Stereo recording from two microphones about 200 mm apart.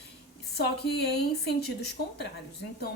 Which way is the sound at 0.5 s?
55° left (ahead or behind).